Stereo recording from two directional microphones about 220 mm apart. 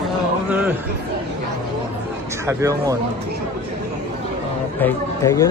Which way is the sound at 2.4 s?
15° right (ahead or behind).